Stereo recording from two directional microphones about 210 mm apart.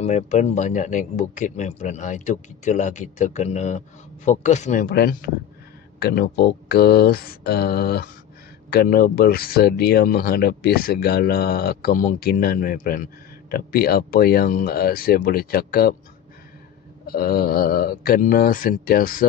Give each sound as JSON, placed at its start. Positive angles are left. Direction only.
{"t": 0.0, "sound": "speech", "side_deg": 35}
{"t": 4.8, "sound": "speech", "side_deg": 50}
{"t": 17.0, "sound": "speech", "side_deg": 45}